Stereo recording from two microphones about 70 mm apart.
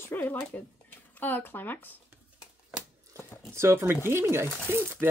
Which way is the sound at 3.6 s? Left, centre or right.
Right.